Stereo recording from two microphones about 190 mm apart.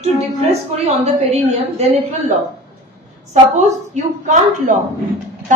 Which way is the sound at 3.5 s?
40° right (ahead or behind).